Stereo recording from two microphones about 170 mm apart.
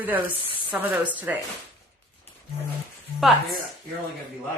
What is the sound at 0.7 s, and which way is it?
Speech, 5° right (ahead or behind).